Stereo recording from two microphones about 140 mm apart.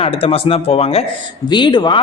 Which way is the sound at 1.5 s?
30° left (ahead or behind).